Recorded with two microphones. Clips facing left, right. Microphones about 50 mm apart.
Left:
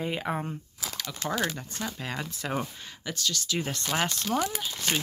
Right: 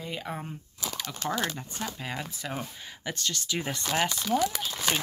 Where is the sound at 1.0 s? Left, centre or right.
Centre.